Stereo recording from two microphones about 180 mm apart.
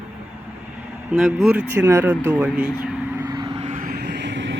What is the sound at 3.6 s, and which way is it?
Vehicle, 45° right (ahead or behind).